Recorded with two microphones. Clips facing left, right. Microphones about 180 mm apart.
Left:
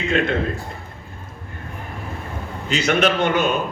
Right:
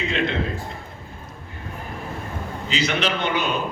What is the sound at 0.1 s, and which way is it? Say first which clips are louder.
Speech: left 7 dB; 50° left (ahead or behind).